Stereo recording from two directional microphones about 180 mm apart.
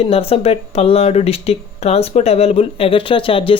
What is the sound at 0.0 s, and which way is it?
Speech, 30° left (ahead or behind).